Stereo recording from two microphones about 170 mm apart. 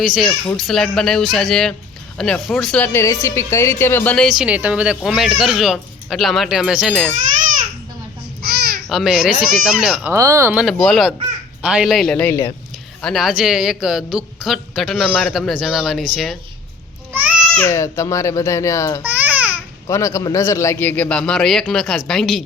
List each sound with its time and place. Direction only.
0.0 s speech: centre (ahead or behind)
8.9 s speech: centre (ahead or behind)
10.5 s speech: centre (ahead or behind); by 12.5 s 15° left (ahead or behind)
13.0 s speech: centre (ahead or behind)
17.1 s a sound: 10° right (ahead or behind)
17.5 s a man's voice: 15° left (ahead or behind)
19.0 s babbling: 10° right (ahead or behind)
19.9 s a man's voice: 20° left (ahead or behind); by 22.4 s centre (ahead or behind)